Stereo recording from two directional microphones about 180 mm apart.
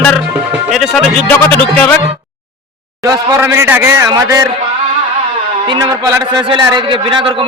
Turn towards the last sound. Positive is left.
turn(degrees=-15)  # may be behind; listen again after turning